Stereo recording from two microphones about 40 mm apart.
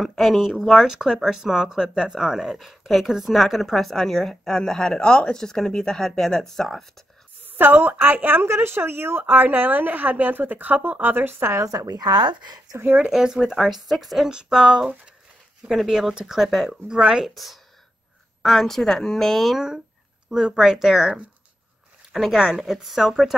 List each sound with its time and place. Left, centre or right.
0.0 s a woman's voice: centre
7.4 s a woman's voice: right
9.2 s a woman's voice: right
13.1 s speech: centre
13.5 s speech: centre
14.3 s speech: centre
16.8 s speech: centre
17.3 s a woman's voice: centre
19.5 s speech: centre
22.1 s speech: centre